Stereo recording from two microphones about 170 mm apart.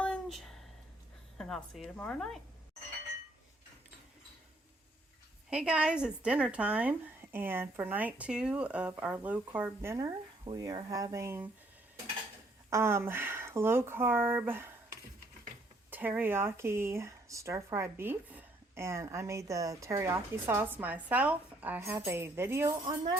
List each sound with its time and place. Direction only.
0.0 s a sound: 5° left (ahead or behind)
1.4 s a woman's voice: centre (ahead or behind)
5.5 s speech: 5° right (ahead or behind)
12.7 s speech: 15° right (ahead or behind)
15.9 s speech: 10° right (ahead or behind)